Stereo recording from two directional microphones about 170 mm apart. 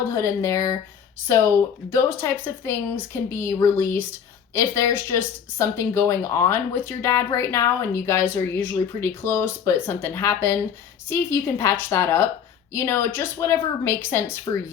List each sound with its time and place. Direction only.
0.1 s speech: 20° left (ahead or behind)